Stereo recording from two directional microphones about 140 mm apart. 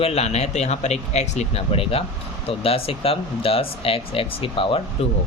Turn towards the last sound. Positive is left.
turn(degrees=40)  # may be behind; listen again after turning